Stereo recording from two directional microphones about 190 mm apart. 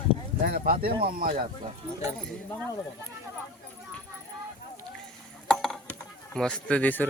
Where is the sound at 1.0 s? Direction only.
50° right (ahead or behind).